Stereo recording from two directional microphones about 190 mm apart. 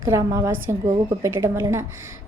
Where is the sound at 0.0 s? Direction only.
20° right (ahead or behind).